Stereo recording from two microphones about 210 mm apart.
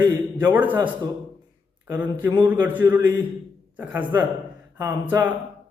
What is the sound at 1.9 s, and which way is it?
A man's voice, 10° right (ahead or behind).